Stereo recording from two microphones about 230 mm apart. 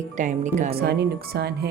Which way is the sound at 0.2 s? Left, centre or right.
Right.